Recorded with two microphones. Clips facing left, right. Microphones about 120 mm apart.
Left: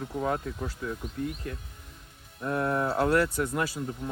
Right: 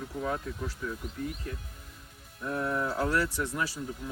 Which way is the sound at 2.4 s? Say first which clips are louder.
Left 3 dB; 55° left (ahead or behind).